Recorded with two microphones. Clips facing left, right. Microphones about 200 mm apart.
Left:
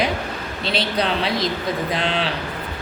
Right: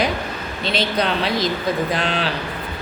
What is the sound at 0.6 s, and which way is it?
Speech, 30° left (ahead or behind).